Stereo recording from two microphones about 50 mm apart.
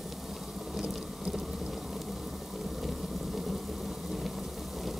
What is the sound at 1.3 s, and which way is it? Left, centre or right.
Thunder, centre.